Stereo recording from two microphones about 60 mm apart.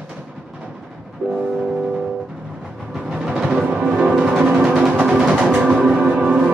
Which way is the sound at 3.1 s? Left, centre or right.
Centre.